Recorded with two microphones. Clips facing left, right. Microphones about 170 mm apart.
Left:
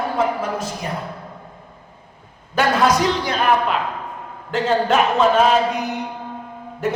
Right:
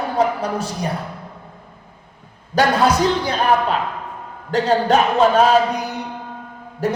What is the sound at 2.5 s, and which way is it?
Speech, 30° right (ahead or behind).